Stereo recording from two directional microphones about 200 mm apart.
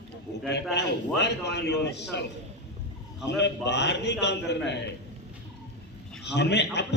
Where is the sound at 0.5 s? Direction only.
60° left (ahead or behind).